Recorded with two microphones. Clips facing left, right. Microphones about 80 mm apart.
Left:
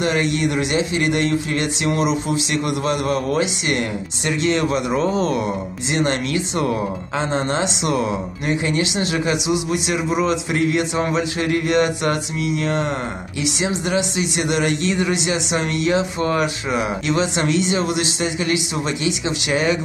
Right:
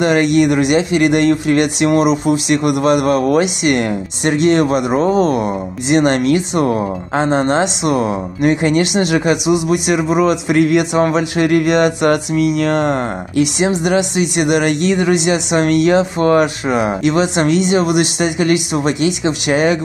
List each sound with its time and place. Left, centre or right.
0.0 s speech: right
8.4 s speech: right
19.2 s speech: right